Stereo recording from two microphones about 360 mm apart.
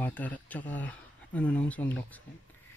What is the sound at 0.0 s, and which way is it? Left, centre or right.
Speech, centre.